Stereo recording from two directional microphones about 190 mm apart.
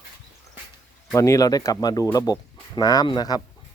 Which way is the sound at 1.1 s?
15° left (ahead or behind).